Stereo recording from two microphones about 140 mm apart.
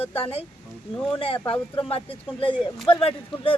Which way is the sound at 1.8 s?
40° left (ahead or behind).